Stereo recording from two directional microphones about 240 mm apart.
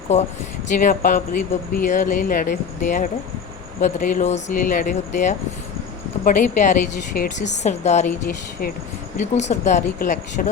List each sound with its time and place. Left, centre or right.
0.7 s speech: left
9.1 s speech: left